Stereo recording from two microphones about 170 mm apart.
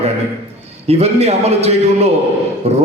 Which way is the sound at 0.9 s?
40° right (ahead or behind).